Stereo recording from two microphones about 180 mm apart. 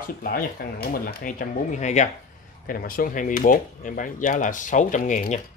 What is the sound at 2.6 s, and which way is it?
Speech, 50° left (ahead or behind).